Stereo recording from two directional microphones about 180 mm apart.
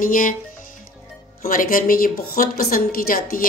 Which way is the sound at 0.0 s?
50° left (ahead or behind).